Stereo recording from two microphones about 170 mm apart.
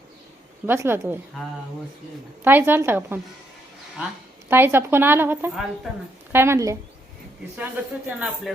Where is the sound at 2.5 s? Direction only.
10° right (ahead or behind).